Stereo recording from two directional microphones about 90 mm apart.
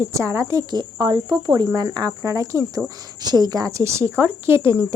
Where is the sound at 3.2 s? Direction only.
50° right (ahead or behind); by 4.8 s 30° right (ahead or behind).